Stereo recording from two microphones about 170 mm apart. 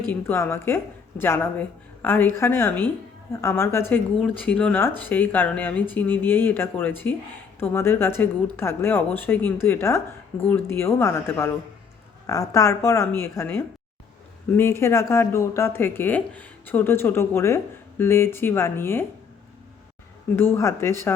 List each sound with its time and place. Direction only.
0.1 s speech: 10° left (ahead or behind)
20.3 s speech: 15° left (ahead or behind)